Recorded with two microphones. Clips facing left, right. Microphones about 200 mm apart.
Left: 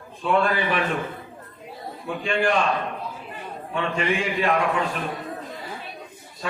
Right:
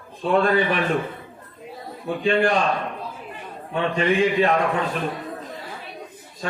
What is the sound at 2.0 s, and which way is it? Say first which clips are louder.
Speech: right 4 dB; 35° right (ahead or behind).